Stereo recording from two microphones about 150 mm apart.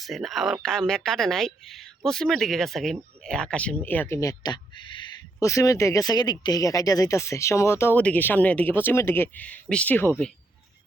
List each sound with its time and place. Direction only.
0.0 s speech: centre (ahead or behind)